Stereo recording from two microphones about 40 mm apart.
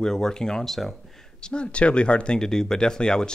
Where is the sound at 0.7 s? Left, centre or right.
Centre.